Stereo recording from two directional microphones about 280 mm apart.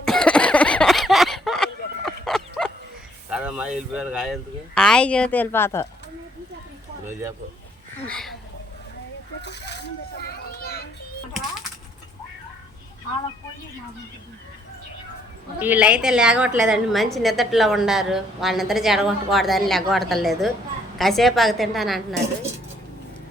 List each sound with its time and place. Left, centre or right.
0.0 s a sound: centre
3.2 s speech: centre
7.1 s speech: centre
8.0 s a woman's voice: centre
9.4 s a sound: left
10.2 s children playing: left
15.5 s a woman's voice: centre